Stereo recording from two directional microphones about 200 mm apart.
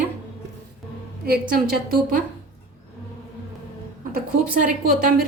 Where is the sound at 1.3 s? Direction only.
50° right (ahead or behind).